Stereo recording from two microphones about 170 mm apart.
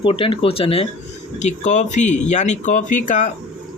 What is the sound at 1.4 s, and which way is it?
Speech, 45° left (ahead or behind).